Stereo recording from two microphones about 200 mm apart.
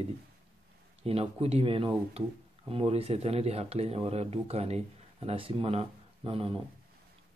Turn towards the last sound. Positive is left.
turn(degrees=-25)  # may be behind; listen again after turning